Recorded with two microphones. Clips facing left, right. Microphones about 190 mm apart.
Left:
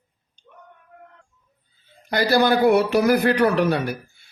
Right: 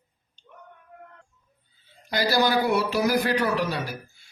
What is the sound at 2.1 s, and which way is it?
A man's voice, 55° left (ahead or behind).